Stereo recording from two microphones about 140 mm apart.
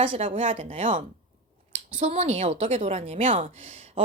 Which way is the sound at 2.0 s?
45° right (ahead or behind).